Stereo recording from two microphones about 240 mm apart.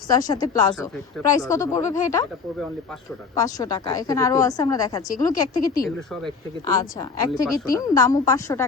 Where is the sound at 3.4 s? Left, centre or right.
Centre.